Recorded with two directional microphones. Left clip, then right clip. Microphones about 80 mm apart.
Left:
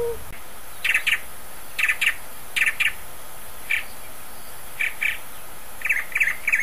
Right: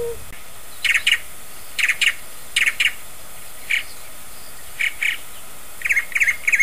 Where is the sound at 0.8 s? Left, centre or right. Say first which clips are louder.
Right 4 dB; centre.